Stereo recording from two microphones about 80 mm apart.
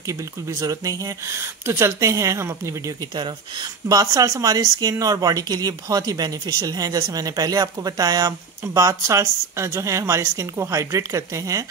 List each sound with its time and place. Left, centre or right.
0.0 s speech: right
3.2 s speech: right